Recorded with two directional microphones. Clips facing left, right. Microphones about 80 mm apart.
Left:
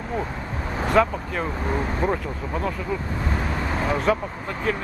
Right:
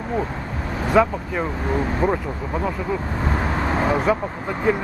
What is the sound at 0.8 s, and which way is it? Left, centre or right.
Speech, centre.